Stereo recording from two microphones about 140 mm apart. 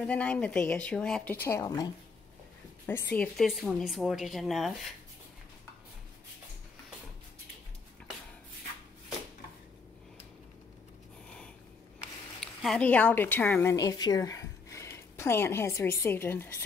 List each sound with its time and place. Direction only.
0.0 s speech: 10° left (ahead or behind)
2.9 s speech: 10° left (ahead or behind)
12.4 s a woman's voice: 5° left (ahead or behind)